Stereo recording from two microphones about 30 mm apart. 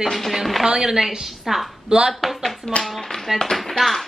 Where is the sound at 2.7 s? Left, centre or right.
Left.